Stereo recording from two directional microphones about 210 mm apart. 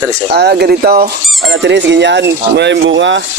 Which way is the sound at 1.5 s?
55° right (ahead or behind).